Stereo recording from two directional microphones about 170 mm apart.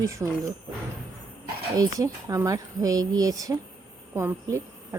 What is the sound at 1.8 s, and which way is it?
A woman's voice, 20° right (ahead or behind).